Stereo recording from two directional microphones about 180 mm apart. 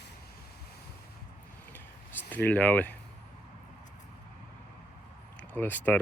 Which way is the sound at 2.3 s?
10° left (ahead or behind).